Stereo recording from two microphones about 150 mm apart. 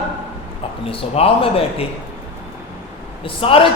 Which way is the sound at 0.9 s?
40° left (ahead or behind).